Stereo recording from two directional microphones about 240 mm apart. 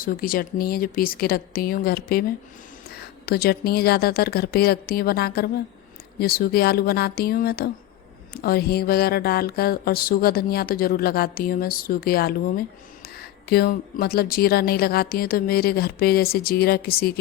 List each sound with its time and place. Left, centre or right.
0.0 s music: left